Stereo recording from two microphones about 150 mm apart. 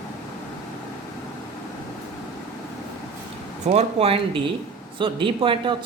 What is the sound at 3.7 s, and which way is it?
Speech, 40° right (ahead or behind).